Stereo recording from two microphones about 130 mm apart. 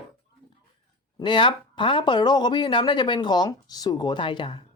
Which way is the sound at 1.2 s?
40° left (ahead or behind).